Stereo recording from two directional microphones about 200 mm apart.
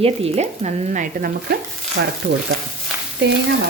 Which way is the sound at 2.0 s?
60° right (ahead or behind).